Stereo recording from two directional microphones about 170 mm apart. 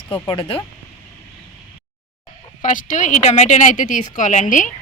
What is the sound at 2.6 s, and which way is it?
A woman's voice, 50° left (ahead or behind).